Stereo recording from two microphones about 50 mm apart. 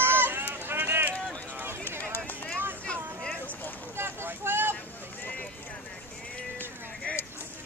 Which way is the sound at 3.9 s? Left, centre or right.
Right.